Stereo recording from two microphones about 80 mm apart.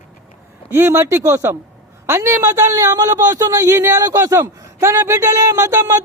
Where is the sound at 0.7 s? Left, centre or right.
Right.